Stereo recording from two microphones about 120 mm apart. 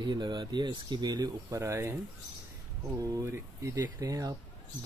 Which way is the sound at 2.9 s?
30° right (ahead or behind).